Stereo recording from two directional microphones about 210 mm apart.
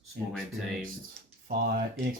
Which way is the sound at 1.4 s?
45° right (ahead or behind).